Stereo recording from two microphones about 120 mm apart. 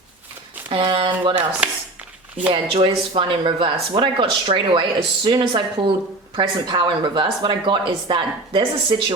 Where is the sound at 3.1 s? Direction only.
45° right (ahead or behind).